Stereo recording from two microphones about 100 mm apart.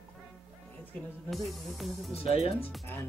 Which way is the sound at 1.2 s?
Centre (ahead or behind).